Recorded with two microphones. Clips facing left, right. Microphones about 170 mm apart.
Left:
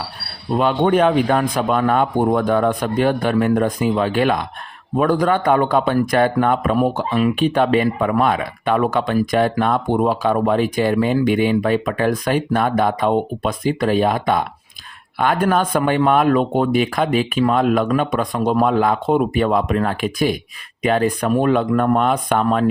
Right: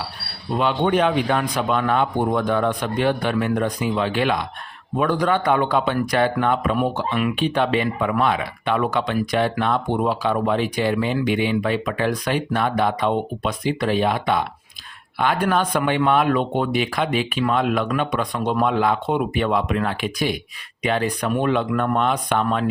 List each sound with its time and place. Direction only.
0.5 s speech: 45° left (ahead or behind)
7.3 s speech: 45° left (ahead or behind)